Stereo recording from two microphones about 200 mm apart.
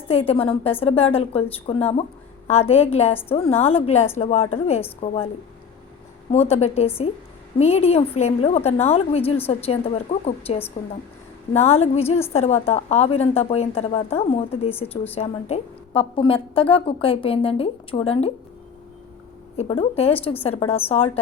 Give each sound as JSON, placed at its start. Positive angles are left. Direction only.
{"t": 0.1, "sound": "a woman's voice", "side_deg": 30}
{"t": 6.3, "sound": "a woman's voice", "side_deg": 30}
{"t": 19.5, "sound": "a woman's voice", "side_deg": 30}